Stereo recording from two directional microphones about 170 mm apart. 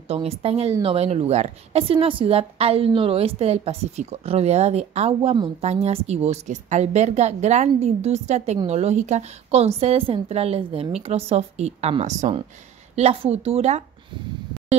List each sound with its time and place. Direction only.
0.1 s a woman's voice: 35° right (ahead or behind)